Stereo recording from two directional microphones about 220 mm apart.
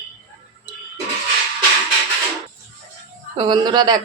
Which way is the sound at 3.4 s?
20° right (ahead or behind).